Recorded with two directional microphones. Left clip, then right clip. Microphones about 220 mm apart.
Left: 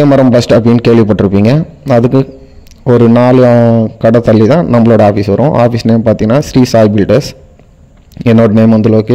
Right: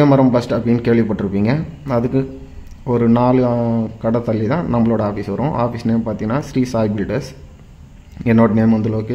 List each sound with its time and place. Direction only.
0.0 s a man's voice: 35° left (ahead or behind)